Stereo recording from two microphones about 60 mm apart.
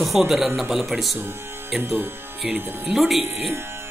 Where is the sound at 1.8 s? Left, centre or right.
Right.